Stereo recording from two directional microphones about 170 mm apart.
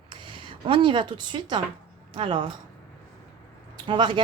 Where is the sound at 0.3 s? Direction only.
30° right (ahead or behind).